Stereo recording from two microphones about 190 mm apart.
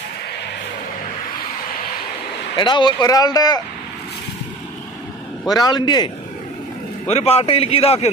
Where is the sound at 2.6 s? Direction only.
25° left (ahead or behind).